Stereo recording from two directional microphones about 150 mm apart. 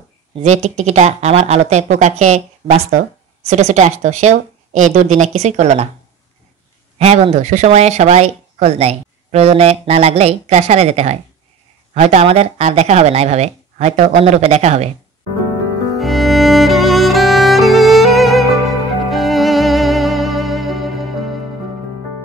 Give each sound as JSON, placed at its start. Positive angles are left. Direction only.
{"t": 0.4, "sound": "speech", "side_deg": -50}
{"t": 7.0, "sound": "speech", "side_deg": -45}
{"t": 16.0, "sound": "music", "side_deg": 0}